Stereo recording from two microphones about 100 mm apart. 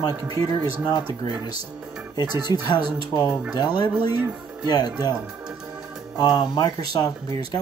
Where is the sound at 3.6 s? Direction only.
45° left (ahead or behind).